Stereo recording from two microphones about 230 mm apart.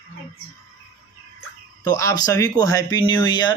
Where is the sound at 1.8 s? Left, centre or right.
Centre.